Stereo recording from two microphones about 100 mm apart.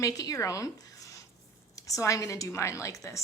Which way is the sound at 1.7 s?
35° left (ahead or behind).